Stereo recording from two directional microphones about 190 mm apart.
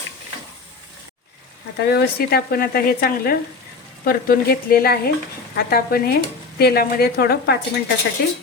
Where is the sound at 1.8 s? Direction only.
55° left (ahead or behind).